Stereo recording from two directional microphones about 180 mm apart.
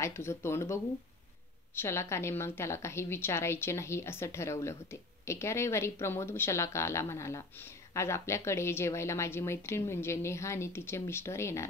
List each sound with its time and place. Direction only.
0.0 s speech: 15° left (ahead or behind)
1.8 s speech: 15° left (ahead or behind)